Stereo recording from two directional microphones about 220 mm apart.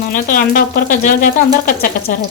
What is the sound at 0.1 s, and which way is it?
Speech, 40° left (ahead or behind).